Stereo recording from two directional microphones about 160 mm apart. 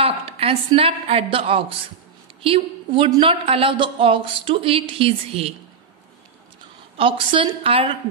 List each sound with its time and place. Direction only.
0.0 s a woman's voice: 35° right (ahead or behind)
7.0 s a woman's voice: 35° right (ahead or behind)